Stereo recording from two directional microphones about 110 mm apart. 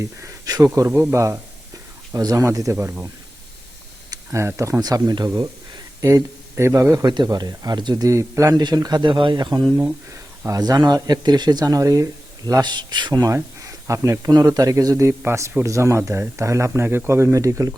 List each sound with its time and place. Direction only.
0.0 s speech: 30° right (ahead or behind)
0.7 s speech: 20° right (ahead or behind)
1.1 s speech: 25° right (ahead or behind)
4.1 s speech: 25° right (ahead or behind)
6.1 s speech: 25° right (ahead or behind)
7.1 s speech: 40° right (ahead or behind)
8.5 s speech: 40° right (ahead or behind)